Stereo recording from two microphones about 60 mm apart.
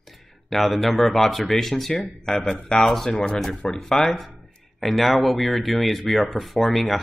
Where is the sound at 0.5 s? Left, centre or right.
Centre.